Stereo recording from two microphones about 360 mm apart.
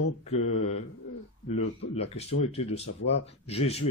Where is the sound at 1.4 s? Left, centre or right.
Centre.